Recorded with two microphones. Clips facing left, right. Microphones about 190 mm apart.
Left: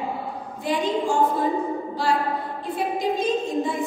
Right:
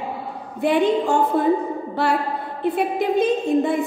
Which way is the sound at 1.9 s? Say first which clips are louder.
Right 3 dB; 60° right (ahead or behind).